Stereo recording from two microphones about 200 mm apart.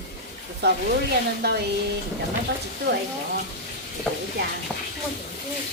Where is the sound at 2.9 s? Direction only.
60° right (ahead or behind).